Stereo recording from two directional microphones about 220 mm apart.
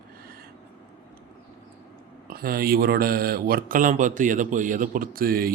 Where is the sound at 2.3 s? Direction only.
40° right (ahead or behind).